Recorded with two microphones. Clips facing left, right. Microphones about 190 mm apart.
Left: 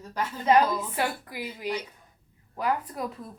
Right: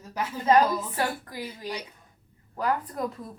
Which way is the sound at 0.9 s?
15° left (ahead or behind).